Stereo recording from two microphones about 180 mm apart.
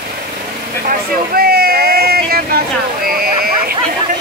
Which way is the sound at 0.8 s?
55° right (ahead or behind).